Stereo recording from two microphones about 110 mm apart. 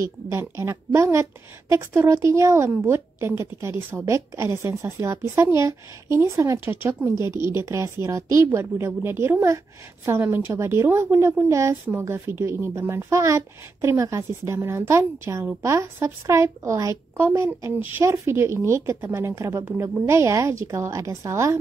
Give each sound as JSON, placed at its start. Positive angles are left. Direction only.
{"t": 0.3, "sound": "speech", "side_deg": -25}
{"t": 18.0, "sound": "speech", "side_deg": -25}